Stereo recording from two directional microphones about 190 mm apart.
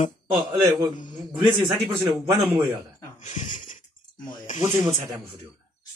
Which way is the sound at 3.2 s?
40° left (ahead or behind).